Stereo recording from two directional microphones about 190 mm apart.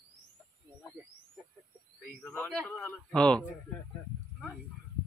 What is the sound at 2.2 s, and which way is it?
A man's voice, 5° left (ahead or behind).